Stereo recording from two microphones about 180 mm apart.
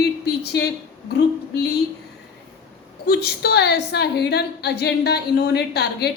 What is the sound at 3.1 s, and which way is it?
A woman's voice, 65° left (ahead or behind).